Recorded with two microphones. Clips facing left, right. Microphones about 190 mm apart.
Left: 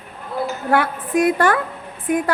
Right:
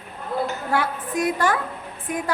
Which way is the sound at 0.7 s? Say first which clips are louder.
Left 8 dB; 60° left (ahead or behind).